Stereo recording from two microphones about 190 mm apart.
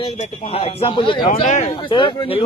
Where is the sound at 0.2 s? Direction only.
35° left (ahead or behind).